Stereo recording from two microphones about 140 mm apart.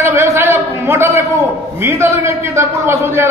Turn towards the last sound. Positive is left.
turn(degrees=-20)  # may be behind; listen again after turning